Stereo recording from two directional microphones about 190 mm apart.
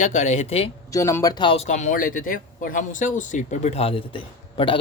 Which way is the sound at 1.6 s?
40° left (ahead or behind).